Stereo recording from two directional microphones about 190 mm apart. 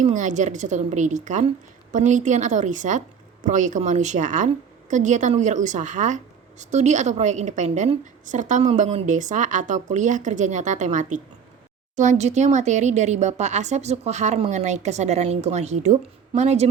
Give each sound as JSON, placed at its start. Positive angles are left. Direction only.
{"t": 0.0, "sound": "a woman's voice", "side_deg": -40}